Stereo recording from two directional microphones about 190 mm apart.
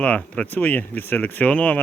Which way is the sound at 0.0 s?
5° left (ahead or behind).